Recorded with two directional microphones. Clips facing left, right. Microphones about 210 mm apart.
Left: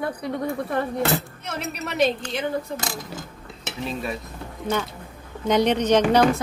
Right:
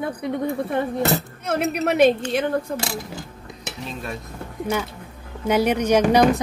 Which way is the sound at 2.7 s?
30° right (ahead or behind).